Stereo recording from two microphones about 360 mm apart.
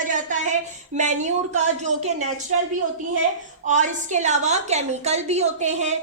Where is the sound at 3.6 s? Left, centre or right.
Centre.